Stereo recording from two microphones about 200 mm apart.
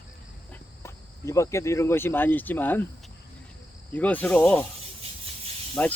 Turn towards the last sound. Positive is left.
turn(degrees=10)  # may be behind; listen again after turning